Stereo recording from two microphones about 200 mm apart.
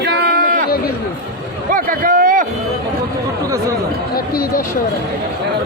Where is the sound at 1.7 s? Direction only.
45° right (ahead or behind).